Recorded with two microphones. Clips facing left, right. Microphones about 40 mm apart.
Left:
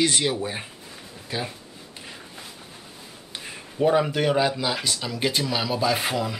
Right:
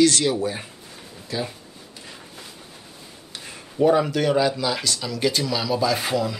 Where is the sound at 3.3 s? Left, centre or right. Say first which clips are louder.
Right 3 dB; centre.